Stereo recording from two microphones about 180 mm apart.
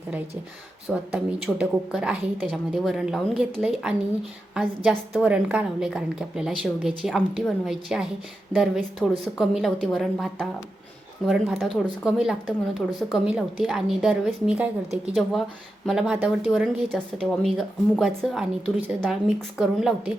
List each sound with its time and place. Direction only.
0.9 s a woman's voice: centre (ahead or behind)